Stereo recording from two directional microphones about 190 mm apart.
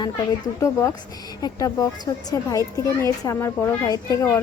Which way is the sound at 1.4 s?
20° left (ahead or behind).